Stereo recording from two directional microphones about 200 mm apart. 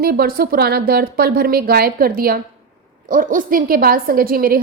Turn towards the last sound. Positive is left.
turn(degrees=-45)  # may be behind; listen again after turning